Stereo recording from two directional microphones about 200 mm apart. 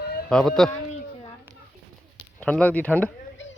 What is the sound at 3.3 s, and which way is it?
Chop, 70° left (ahead or behind).